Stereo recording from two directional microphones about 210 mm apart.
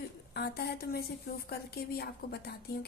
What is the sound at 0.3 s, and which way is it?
A woman's voice, 50° left (ahead or behind).